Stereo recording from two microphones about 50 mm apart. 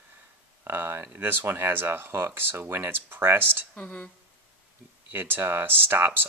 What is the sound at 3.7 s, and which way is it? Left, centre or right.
Speech, left.